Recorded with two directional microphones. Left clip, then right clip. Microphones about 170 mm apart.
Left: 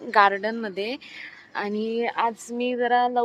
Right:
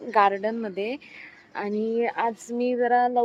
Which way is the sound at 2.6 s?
15° right (ahead or behind).